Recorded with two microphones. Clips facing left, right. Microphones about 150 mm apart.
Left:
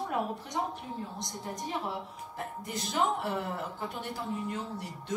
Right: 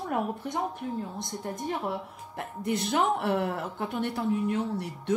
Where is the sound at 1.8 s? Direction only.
65° right (ahead or behind).